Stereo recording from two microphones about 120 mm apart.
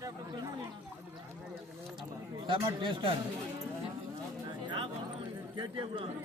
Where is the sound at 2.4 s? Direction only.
45° right (ahead or behind).